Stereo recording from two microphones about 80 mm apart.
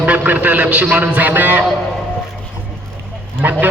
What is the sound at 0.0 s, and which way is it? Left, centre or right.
Honk, centre.